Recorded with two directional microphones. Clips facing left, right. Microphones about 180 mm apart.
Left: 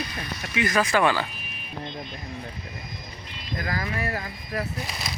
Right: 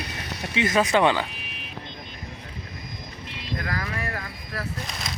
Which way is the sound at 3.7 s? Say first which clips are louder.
Left 4 dB; 25° left (ahead or behind).